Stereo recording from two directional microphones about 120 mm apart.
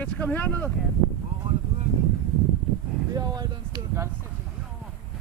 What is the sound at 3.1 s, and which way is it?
Speech, 35° right (ahead or behind).